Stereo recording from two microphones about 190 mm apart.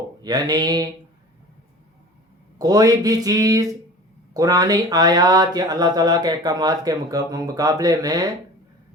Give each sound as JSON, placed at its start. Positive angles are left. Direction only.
{"t": 0.2, "sound": "speech", "side_deg": -20}
{"t": 2.6, "sound": "speech", "side_deg": -20}